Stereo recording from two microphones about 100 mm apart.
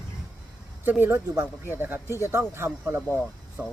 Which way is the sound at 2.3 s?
25° right (ahead or behind).